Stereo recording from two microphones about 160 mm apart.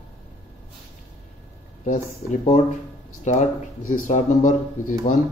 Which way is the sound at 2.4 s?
40° left (ahead or behind).